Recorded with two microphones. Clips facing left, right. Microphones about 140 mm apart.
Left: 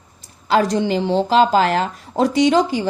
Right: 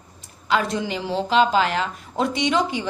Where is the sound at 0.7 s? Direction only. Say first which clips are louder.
Left 7 dB; 30° left (ahead or behind).